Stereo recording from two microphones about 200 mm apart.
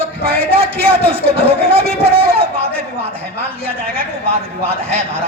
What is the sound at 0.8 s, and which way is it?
A man's voice, 30° right (ahead or behind).